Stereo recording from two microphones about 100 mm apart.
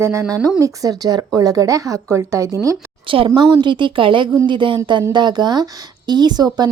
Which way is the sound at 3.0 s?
60° right (ahead or behind).